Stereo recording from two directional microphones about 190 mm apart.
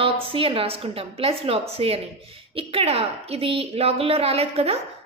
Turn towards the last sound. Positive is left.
turn(degrees=-30)  # may be behind; listen again after turning